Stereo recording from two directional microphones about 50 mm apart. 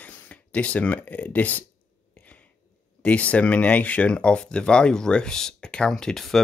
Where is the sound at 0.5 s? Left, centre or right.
Left.